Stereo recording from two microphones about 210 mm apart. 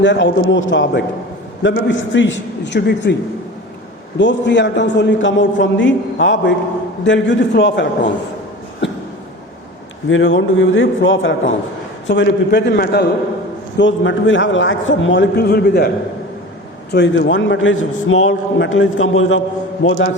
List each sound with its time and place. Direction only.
0.0 s a man's voice: 60° left (ahead or behind)
4.2 s a man's voice: 60° left (ahead or behind)
8.8 s a sound: 55° left (ahead or behind)
10.1 s a man's voice: 65° left (ahead or behind); by 13.1 s 50° left (ahead or behind)
13.7 s a man's voice: 60° left (ahead or behind)
16.9 s a man's voice: 55° left (ahead or behind)